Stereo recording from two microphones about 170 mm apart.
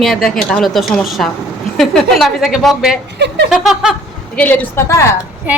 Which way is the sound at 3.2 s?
80° right.